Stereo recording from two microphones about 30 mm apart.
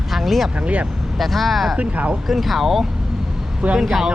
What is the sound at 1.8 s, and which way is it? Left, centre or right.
Speech, right.